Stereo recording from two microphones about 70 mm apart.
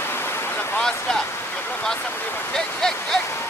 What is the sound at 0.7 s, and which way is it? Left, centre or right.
Speech, centre.